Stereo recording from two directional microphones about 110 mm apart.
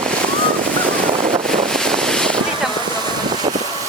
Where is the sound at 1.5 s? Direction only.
5° left (ahead or behind).